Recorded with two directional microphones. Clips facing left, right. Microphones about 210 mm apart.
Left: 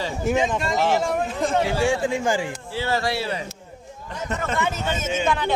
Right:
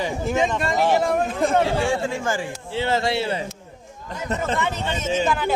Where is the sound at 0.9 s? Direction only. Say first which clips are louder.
Right 2 dB; 55° right (ahead or behind).